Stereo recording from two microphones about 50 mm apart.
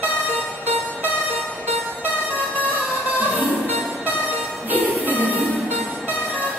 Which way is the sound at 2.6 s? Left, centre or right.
Right.